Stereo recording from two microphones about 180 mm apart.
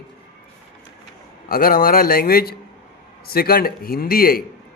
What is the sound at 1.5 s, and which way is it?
A man's voice, 55° left (ahead or behind).